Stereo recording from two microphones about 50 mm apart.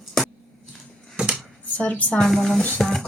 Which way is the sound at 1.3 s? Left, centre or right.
Left.